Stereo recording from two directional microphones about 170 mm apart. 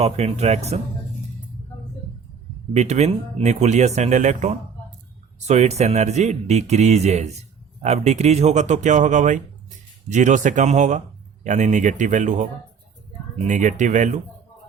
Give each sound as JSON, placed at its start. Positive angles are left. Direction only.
{"t": 0.0, "sound": "speech", "side_deg": -40}
{"t": 2.7, "sound": "speech", "side_deg": -40}
{"t": 13.5, "sound": "speech", "side_deg": -45}